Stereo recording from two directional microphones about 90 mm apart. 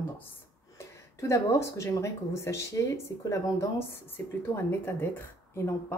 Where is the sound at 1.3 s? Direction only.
35° left (ahead or behind).